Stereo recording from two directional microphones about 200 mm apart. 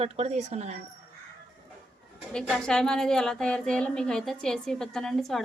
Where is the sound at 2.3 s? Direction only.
5° left (ahead or behind).